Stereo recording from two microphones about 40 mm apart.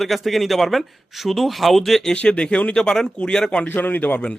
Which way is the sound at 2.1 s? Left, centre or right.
Left.